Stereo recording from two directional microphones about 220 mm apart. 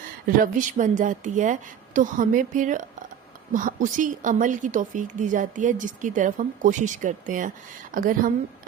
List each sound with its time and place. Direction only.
0.3 s speech: 40° right (ahead or behind)